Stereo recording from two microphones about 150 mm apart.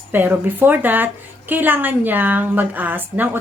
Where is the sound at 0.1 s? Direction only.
10° right (ahead or behind).